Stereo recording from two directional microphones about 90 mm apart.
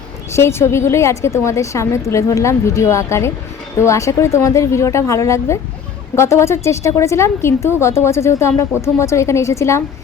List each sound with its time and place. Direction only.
0.3 s a woman's voice: 30° left (ahead or behind)